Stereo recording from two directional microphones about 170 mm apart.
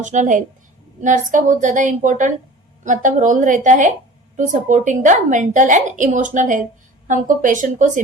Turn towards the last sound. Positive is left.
turn(degrees=-50)  # may be behind; listen again after turning